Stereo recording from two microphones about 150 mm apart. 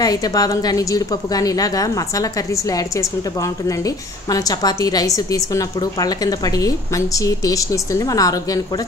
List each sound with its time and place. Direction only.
0.0 s a woman's voice: 25° left (ahead or behind)